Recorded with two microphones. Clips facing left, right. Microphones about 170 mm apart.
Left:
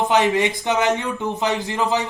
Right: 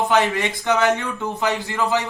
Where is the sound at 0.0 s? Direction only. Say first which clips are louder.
Left 2 dB; 20° left (ahead or behind).